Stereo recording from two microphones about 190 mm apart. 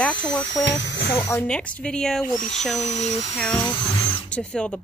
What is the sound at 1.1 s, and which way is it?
Speech, 15° left (ahead or behind).